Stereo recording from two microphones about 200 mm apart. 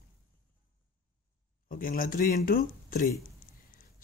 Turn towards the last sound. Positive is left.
turn(degrees=45)  # may be behind; listen again after turning